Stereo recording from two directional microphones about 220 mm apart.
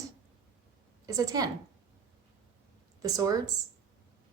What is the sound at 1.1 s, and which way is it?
Speech, 15° right (ahead or behind).